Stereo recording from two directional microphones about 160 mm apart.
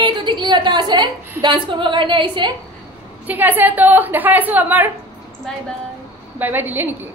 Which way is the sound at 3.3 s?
10° right (ahead or behind).